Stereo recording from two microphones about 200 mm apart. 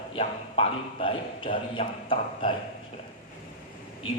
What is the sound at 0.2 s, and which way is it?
A man's voice, 30° left (ahead or behind).